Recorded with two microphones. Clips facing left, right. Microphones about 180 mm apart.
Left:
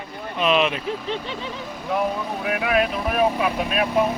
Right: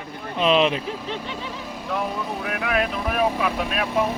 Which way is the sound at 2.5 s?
5° left (ahead or behind).